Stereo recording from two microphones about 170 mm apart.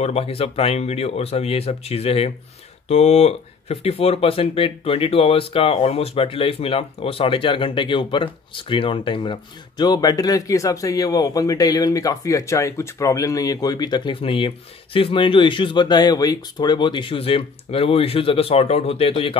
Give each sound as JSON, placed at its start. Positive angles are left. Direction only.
{"t": 0.0, "sound": "speech", "side_deg": 35}